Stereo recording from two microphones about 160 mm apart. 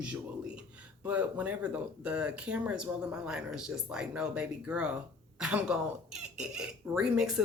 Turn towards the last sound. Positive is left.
turn(degrees=-5)  # may be behind; listen again after turning